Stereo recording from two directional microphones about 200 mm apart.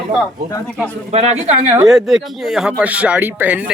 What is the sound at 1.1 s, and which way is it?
Speech, 35° right (ahead or behind).